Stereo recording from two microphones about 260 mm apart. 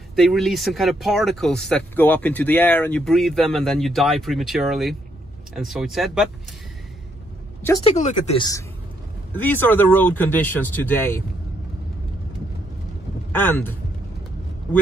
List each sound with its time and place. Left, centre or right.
0.1 s speech: centre
7.8 s speech: left; by 11.2 s centre
13.3 s speech: centre